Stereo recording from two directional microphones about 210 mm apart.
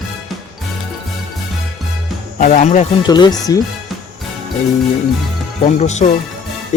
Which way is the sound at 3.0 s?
20° left (ahead or behind).